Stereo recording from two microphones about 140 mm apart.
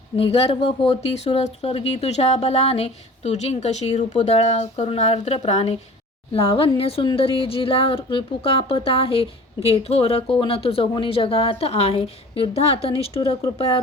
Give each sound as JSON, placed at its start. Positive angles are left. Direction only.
{"t": 0.2, "sound": "speech", "side_deg": 45}
{"t": 6.7, "sound": "speech", "side_deg": 45}